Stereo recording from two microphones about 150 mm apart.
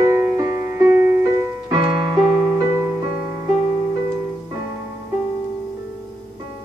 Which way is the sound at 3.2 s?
10° right (ahead or behind).